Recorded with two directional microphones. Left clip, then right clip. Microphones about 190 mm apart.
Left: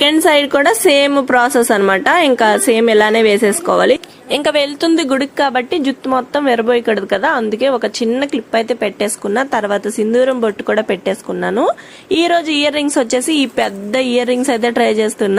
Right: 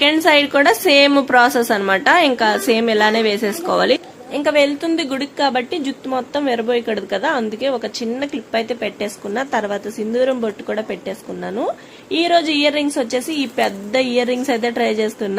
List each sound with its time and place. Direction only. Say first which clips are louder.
0.0 s a woman's voice: left 2 dB; 25° left (ahead or behind)
4.3 s a woman's voice: left 1 dB; 55° left (ahead or behind)
4.9 s speech: left 5 dB; 20° left (ahead or behind)